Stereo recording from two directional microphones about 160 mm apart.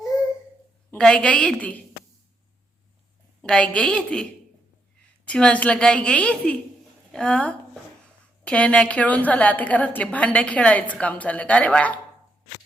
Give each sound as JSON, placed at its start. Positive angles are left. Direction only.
{"t": 0.9, "sound": "a woman's voice", "side_deg": 5}
{"t": 3.4, "sound": "a woman's voice", "side_deg": 5}
{"t": 5.3, "sound": "a woman's voice", "side_deg": 5}